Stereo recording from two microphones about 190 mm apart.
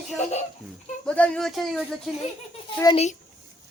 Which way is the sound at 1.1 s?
5° left (ahead or behind).